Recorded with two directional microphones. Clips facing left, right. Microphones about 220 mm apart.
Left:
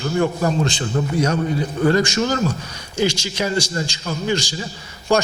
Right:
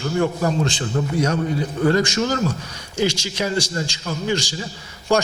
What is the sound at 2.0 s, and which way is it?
A man's voice, 15° left (ahead or behind).